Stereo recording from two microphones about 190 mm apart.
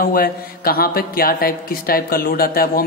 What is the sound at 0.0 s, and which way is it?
Mantra, 50° left (ahead or behind).